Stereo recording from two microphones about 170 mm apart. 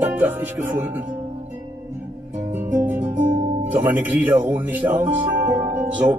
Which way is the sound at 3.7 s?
10° right (ahead or behind).